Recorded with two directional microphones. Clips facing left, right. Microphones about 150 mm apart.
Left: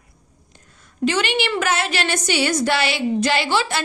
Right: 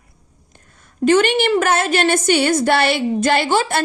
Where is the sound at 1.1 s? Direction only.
50° right (ahead or behind).